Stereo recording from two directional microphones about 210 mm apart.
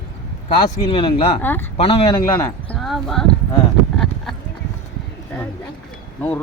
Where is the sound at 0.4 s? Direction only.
25° left (ahead or behind).